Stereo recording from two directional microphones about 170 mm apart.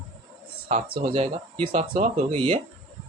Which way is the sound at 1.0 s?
35° right (ahead or behind).